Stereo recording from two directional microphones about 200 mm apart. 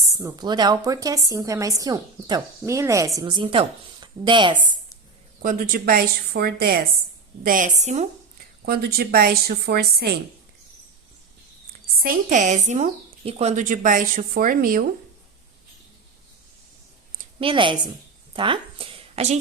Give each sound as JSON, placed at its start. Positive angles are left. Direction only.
{"t": 0.1, "sound": "a woman's voice", "side_deg": -15}
{"t": 5.4, "sound": "a woman's voice", "side_deg": -45}
{"t": 8.6, "sound": "a woman's voice", "side_deg": -50}
{"t": 12.0, "sound": "speech", "side_deg": -40}
{"t": 17.4, "sound": "a woman's voice", "side_deg": -25}